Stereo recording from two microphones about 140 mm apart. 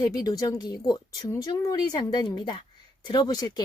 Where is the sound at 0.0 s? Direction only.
25° left (ahead or behind).